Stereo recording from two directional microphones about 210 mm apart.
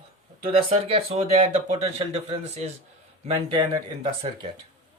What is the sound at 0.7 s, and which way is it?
Speech, 25° right (ahead or behind).